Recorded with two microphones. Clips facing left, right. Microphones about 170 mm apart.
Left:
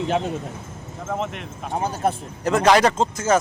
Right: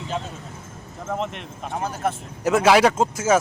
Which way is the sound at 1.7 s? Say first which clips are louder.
Left 3 dB; 30° left (ahead or behind).